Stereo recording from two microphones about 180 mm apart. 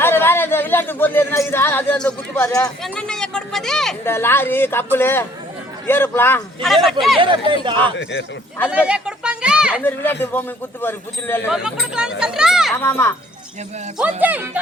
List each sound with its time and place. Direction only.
0.0 s speech: 10° left (ahead or behind)
2.8 s speech: 5° left (ahead or behind)
6.6 s speech: centre (ahead or behind)
7.2 s speech: 30° right (ahead or behind)
8.7 s a sound: 5° right (ahead or behind)
9.8 s speech: 10° left (ahead or behind)
11.5 s speech: 5° right (ahead or behind)
12.8 s speech: 10° left (ahead or behind)
14.0 s speech: 10° right (ahead or behind)